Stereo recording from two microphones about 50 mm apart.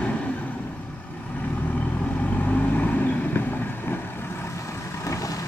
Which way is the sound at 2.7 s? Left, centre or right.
Left.